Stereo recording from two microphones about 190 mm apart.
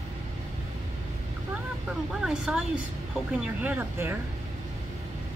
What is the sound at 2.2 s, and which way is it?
Speech, 5° right (ahead or behind).